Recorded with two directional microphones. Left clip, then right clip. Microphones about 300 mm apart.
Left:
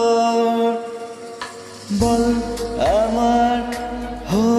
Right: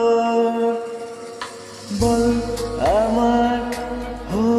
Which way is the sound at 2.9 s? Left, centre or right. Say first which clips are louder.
Even; left.